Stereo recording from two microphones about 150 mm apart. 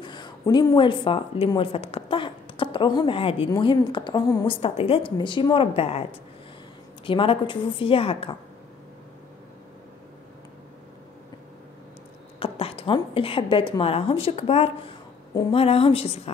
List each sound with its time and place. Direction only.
0.0 s a woman's voice: 30° left (ahead or behind)
4.5 s a woman's voice: 35° left (ahead or behind)
7.1 s a woman's voice: 35° left (ahead or behind)
12.4 s a woman's voice: 40° left (ahead or behind)